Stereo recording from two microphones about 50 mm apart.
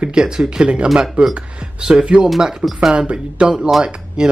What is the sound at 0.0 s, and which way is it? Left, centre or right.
Speech, centre.